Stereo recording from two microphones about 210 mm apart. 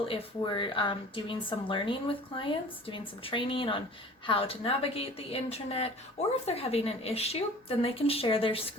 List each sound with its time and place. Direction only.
0.1 s speech: 25° left (ahead or behind)